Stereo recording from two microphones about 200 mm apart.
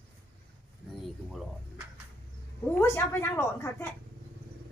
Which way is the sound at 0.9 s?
Centre (ahead or behind).